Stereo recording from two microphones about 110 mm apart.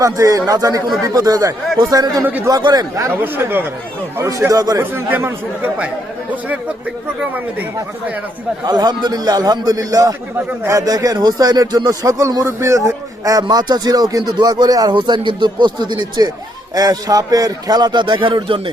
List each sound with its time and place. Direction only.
0.0 s speech: 30° right (ahead or behind)
2.2 s a man's voice: 15° right (ahead or behind)
2.5 s speech: 35° right (ahead or behind)
4.8 s speech: 20° right (ahead or behind)
8.6 s speech: 40° right (ahead or behind)
10.3 s a man's voice: 20° right (ahead or behind)
10.8 s speech: 35° right (ahead or behind); by 18.7 s 55° right (ahead or behind)